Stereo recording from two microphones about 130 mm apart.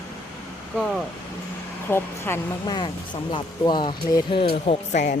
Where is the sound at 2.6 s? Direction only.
35° left (ahead or behind).